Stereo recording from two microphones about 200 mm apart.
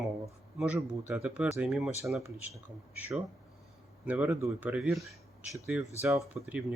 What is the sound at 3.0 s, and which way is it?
Speech, 5° right (ahead or behind).